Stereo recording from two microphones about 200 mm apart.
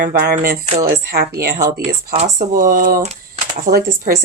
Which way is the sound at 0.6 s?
40° right (ahead or behind).